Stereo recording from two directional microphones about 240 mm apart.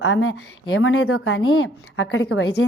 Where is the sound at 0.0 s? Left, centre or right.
Left.